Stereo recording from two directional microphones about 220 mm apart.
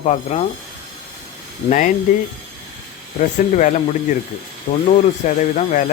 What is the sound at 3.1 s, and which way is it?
Speech, 35° left (ahead or behind).